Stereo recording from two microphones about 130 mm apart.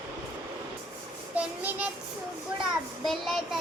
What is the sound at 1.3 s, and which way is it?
Speech, 10° right (ahead or behind).